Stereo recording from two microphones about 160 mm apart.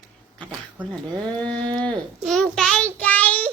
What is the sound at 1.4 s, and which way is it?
Speech, 5° left (ahead or behind).